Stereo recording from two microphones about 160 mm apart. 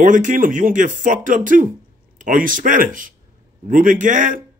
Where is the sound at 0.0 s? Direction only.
50° right (ahead or behind).